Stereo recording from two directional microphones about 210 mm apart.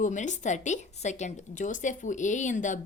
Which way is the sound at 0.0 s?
35° left (ahead or behind).